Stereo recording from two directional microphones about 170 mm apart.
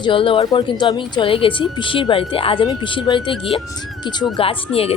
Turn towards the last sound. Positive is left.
turn(degrees=35)  # may be behind; listen again after turning